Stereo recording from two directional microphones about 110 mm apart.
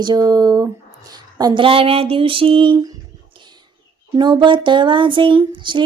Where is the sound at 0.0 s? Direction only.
35° right (ahead or behind).